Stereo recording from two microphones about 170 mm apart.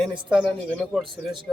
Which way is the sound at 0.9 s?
Centre (ahead or behind).